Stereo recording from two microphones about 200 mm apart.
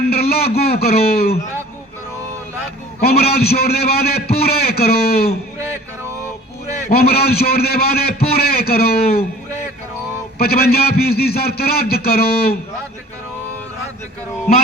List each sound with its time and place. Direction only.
0.1 s a man's voice: 50° left (ahead or behind)
3.0 s a man's voice: 50° left (ahead or behind)
6.9 s a man's voice: 50° left (ahead or behind)
10.3 s a man's voice: 50° left (ahead or behind)